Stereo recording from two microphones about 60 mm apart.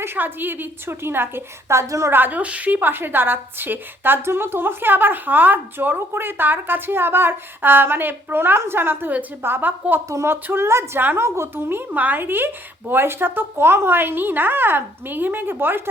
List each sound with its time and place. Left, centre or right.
0.0 s a woman's voice: right
2.0 s a woman's voice: right
11.9 s a woman's voice: right